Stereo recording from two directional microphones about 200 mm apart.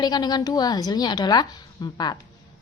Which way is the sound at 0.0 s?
20° left (ahead or behind).